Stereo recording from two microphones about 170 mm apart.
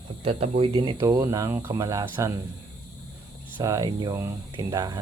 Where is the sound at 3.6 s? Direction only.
20° right (ahead or behind).